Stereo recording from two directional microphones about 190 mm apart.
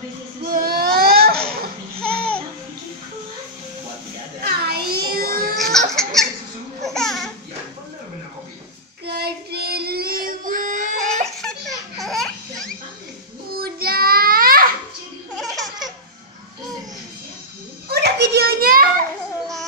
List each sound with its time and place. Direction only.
0.4 s baby cry: 50° right (ahead or behind)
2.0 s babbling: 5° left (ahead or behind)
4.4 s a sound: 55° right (ahead or behind)
5.6 s a sound: centre (ahead or behind)
9.0 s child singing: 55° right (ahead or behind)
11.4 s baby laughter: centre (ahead or behind)
13.6 s child singing: 50° right (ahead or behind)
15.3 s baby laughter: centre (ahead or behind)
17.8 s children playing: 60° right (ahead or behind)